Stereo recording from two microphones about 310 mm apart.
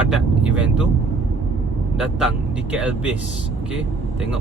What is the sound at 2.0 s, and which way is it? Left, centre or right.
Speech, centre.